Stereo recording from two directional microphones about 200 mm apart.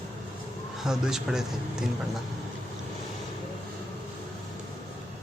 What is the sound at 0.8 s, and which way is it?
Speech, centre (ahead or behind).